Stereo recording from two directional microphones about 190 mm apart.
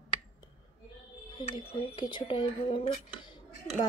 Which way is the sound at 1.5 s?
25° left (ahead or behind).